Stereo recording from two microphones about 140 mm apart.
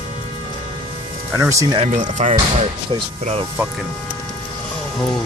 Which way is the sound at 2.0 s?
55° right (ahead or behind).